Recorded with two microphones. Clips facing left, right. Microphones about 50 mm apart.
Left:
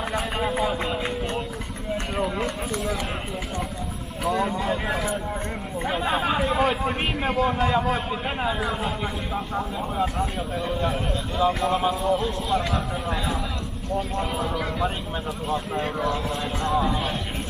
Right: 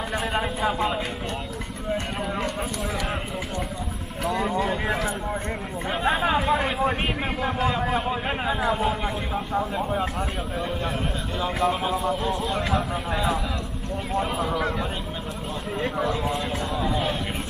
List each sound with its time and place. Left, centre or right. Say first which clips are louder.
0.1 s a sound: even; centre
2.1 s run: left 2 dB; centre
4.2 s speech: even; centre
11.3 s speech: left 2 dB; centre
16.0 s speech: right 3 dB; centre
16.8 s a sound: even; centre